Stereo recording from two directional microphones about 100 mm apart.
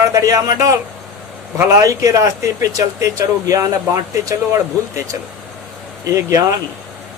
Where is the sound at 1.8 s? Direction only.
35° right (ahead or behind).